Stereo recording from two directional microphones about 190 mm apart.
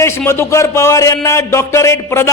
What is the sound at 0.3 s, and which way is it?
A man's voice, 15° left (ahead or behind).